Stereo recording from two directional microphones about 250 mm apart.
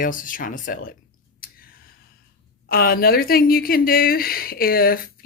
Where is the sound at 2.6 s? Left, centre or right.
Left.